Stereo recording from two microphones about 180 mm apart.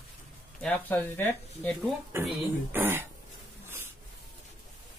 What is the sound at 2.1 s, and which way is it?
Speech, 15° right (ahead or behind).